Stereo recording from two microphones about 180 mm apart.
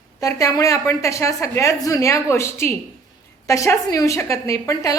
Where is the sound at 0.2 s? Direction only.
20° left (ahead or behind).